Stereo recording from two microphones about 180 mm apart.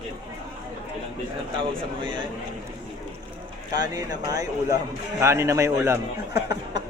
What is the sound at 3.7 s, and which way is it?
Speech, 20° right (ahead or behind).